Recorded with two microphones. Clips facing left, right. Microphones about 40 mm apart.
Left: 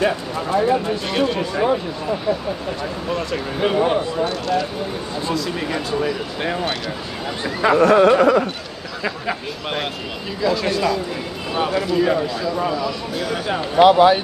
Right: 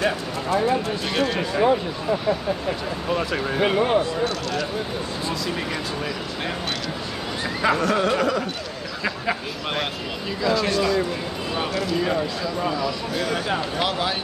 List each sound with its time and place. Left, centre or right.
0.0 s speech: centre
4.2 s speech: centre
5.7 s speech: centre
7.8 s speech: left
9.0 s speech: centre
13.7 s speech: left